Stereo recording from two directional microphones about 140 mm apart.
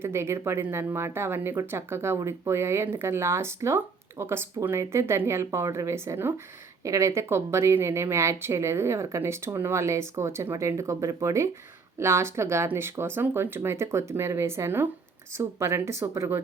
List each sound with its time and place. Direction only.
0.0 s speech: 20° right (ahead or behind)